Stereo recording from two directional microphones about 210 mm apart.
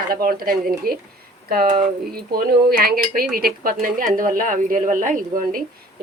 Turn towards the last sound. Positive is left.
turn(degrees=-40)  # may be behind; listen again after turning